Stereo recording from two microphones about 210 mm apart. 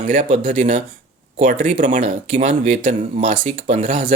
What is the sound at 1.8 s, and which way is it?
Speech, 35° right (ahead or behind).